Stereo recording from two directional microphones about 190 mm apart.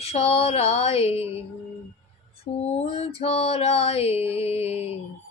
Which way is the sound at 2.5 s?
30° left (ahead or behind).